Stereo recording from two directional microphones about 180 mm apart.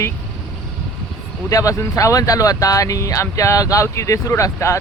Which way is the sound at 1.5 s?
20° left (ahead or behind).